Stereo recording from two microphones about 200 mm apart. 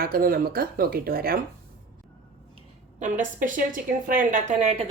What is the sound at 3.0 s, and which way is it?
A woman's voice, 40° right (ahead or behind).